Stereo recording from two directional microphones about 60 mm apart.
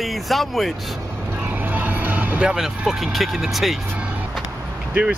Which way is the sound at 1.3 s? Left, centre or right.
Right.